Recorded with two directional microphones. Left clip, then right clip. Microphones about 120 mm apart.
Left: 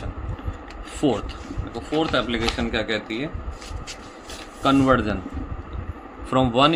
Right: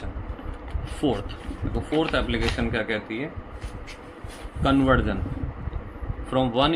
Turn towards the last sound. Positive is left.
turn(degrees=45)  # may be behind; listen again after turning